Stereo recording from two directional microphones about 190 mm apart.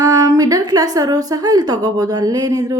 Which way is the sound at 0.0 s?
20° right (ahead or behind).